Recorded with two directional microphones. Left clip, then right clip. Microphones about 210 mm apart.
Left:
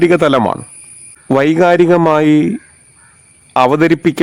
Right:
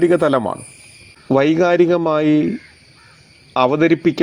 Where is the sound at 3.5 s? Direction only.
25° left (ahead or behind).